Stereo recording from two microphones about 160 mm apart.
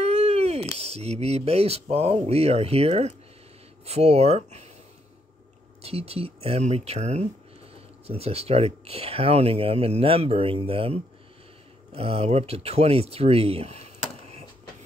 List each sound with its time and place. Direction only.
0.1 s a sound: 40° right (ahead or behind)
0.7 s speech: 40° right (ahead or behind)
5.8 s speech: 40° right (ahead or behind)